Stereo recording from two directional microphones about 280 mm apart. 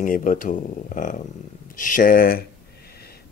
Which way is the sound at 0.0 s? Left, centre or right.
Left.